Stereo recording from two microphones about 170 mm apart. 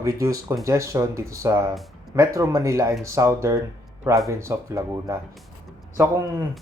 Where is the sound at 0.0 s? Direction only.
20° right (ahead or behind).